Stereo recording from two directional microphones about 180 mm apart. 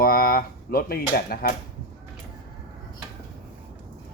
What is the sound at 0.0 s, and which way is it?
Speech, 55° left (ahead or behind).